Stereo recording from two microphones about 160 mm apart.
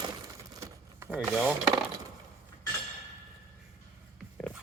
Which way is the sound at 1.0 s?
10° right (ahead or behind).